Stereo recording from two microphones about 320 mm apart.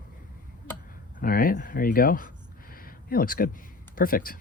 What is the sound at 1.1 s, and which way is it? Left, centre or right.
Speech, left.